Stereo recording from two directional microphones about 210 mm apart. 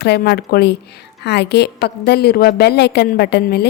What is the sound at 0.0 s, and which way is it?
A woman's voice, 50° left (ahead or behind).